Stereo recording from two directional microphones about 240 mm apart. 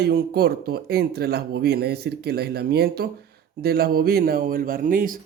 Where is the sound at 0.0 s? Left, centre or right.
Right.